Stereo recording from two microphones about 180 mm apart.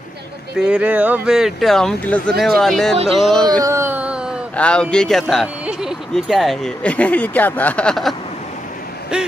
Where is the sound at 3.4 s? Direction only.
20° right (ahead or behind).